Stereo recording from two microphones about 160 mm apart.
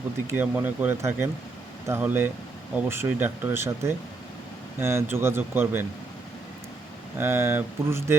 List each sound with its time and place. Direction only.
0.3 s speech: 15° right (ahead or behind)
7.2 s speech: 15° right (ahead or behind)